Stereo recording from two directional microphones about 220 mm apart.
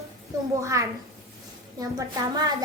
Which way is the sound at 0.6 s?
15° right (ahead or behind).